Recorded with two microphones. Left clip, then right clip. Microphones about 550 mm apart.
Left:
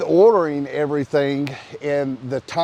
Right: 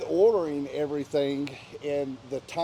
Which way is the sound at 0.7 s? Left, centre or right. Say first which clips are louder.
Left 8 dB; left.